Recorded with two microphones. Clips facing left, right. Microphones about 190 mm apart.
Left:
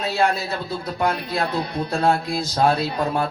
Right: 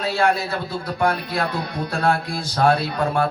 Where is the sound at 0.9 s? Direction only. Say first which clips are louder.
Right 1 dB; 25° left (ahead or behind).